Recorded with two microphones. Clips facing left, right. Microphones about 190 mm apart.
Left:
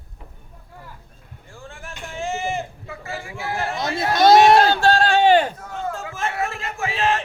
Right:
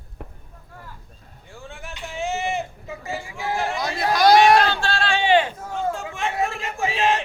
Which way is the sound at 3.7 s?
25° left (ahead or behind).